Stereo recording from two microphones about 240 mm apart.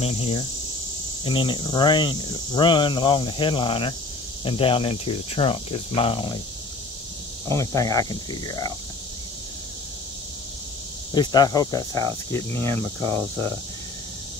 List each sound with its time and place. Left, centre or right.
0.0 s speech: left
7.4 s speech: centre
11.1 s speech: centre